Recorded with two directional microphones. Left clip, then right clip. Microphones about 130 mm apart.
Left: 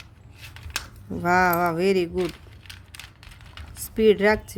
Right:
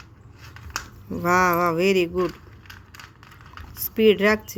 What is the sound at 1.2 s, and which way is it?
Speech, 35° left (ahead or behind).